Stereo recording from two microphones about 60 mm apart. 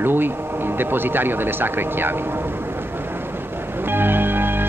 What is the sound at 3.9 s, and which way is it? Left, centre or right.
Music, right.